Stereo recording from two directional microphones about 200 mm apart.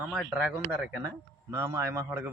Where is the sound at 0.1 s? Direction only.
Centre (ahead or behind).